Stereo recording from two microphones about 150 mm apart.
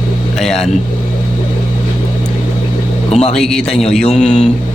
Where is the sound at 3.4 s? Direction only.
5° left (ahead or behind).